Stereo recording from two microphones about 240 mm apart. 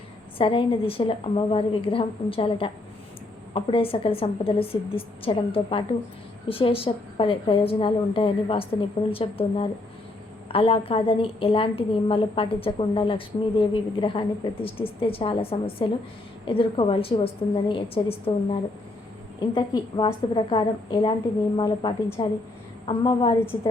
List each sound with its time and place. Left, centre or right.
0.3 s a woman's voice: left